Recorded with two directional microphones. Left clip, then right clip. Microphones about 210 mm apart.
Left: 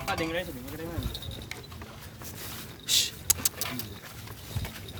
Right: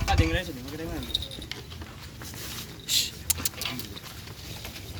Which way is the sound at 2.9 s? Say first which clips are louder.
Left 1 dB; 40° left (ahead or behind).